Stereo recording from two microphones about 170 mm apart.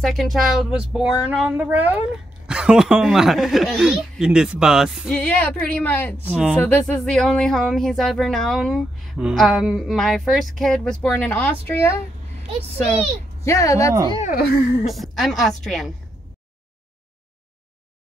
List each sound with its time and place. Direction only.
0.0 s speech: centre (ahead or behind)
6.2 s speech: 5° right (ahead or behind)
6.6 s speech: 5° left (ahead or behind)
13.4 s speech: 15° left (ahead or behind)
13.9 s speech: 25° right (ahead or behind)
14.2 s speech: 60° left (ahead or behind)
14.9 s speech: centre (ahead or behind)